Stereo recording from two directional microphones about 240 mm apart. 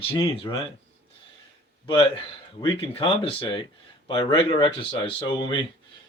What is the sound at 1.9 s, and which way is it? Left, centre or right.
Speech, left.